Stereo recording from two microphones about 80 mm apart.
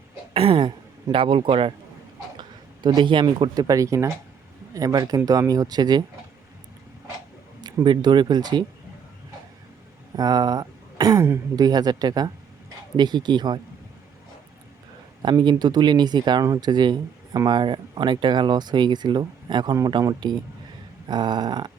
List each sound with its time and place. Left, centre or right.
1.1 s a man's voice: right
2.4 s speech: right
7.9 s speech: right
10.2 s speech: right
15.2 s speech: right
16.4 s speech: right